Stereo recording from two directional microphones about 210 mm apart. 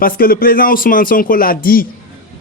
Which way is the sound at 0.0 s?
45° left (ahead or behind).